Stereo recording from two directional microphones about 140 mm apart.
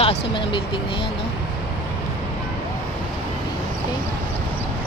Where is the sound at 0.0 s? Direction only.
40° left (ahead or behind).